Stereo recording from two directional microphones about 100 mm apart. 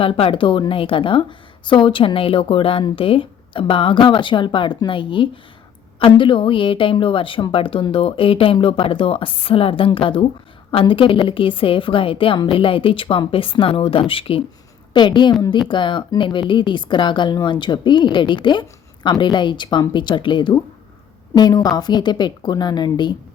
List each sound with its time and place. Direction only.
0.0 s speech: 65° left (ahead or behind)
14.9 s speech: 50° left (ahead or behind)
21.3 s a woman's voice: 40° left (ahead or behind)